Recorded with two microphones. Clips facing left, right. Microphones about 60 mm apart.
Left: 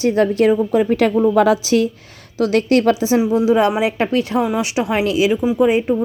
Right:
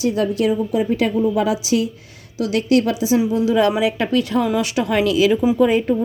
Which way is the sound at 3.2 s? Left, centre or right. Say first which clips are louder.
Left 4 dB; left.